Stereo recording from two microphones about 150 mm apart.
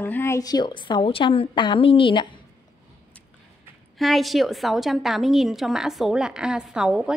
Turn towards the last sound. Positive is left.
turn(degrees=-5)  # may be behind; listen again after turning